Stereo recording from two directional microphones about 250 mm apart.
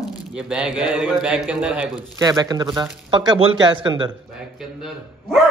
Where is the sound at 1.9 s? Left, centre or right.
Centre.